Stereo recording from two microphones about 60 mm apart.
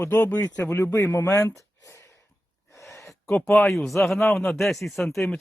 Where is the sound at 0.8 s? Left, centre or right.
Left.